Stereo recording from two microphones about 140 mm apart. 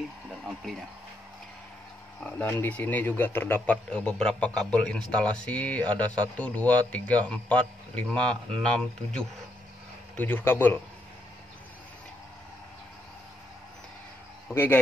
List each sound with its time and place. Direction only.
2.1 s a man's voice: 5° left (ahead or behind)
14.5 s a man's voice: 15° left (ahead or behind)